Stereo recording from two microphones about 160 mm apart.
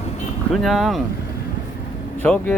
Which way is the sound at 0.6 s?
Centre (ahead or behind).